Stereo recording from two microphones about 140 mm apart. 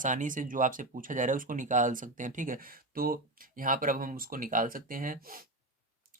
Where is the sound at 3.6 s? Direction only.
75° right (ahead or behind); by 5.5 s 90° right.